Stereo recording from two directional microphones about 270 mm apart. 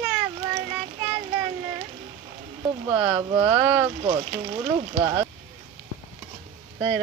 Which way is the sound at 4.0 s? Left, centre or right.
Centre.